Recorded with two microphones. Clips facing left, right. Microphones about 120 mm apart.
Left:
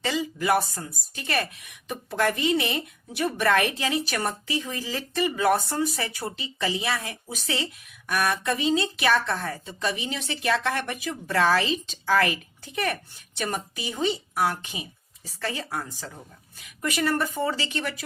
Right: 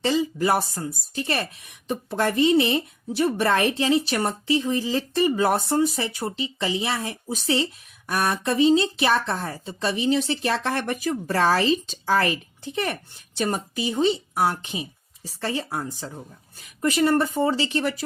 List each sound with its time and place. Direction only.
0.0 s speech: 30° right (ahead or behind)